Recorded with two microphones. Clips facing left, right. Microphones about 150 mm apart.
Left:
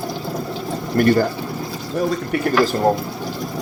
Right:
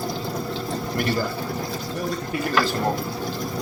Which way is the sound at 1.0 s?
50° left (ahead or behind).